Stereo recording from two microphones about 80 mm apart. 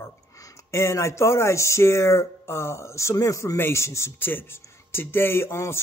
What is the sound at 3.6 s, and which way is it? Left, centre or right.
Speech, left.